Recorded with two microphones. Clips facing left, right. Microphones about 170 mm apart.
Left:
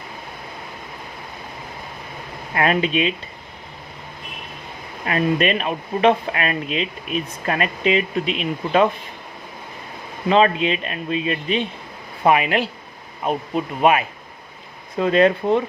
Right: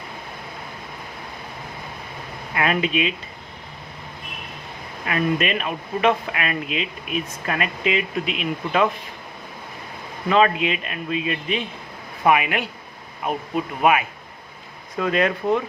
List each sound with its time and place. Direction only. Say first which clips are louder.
2.6 s speech: left 2 dB; 35° left (ahead or behind)
5.0 s speech: left 3 dB; 35° left (ahead or behind)
10.2 s speech: left 2 dB; 30° left (ahead or behind)
13.8 s speech: left 2 dB; 25° left (ahead or behind)